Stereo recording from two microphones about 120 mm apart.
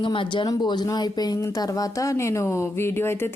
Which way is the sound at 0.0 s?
40° left (ahead or behind).